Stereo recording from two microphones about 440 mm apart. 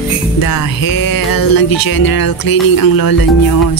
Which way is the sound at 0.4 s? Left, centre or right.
Left.